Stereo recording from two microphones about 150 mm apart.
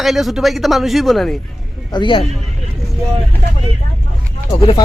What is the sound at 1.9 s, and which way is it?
Speech, 30° left (ahead or behind).